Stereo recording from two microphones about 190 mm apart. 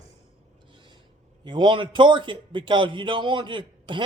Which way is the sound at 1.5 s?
25° right (ahead or behind).